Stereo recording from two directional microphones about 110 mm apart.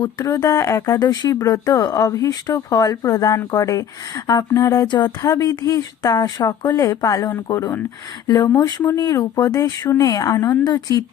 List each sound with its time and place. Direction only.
0.0 s speech: 35° left (ahead or behind)